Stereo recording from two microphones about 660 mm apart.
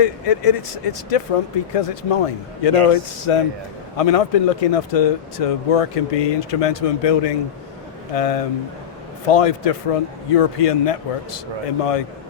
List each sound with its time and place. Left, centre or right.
0.0 s speech: left